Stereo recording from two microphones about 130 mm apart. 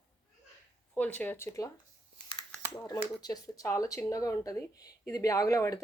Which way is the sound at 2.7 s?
20° left (ahead or behind).